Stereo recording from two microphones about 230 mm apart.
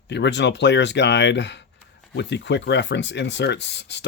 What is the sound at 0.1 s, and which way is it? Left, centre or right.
Speech, left.